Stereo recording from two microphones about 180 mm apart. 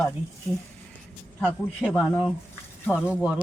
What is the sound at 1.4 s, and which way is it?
Speech, centre (ahead or behind).